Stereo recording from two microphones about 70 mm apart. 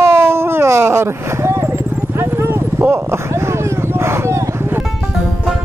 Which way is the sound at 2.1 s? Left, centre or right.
Right.